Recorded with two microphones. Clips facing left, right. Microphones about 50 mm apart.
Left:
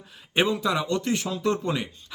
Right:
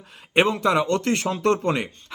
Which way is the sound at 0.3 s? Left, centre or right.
Right.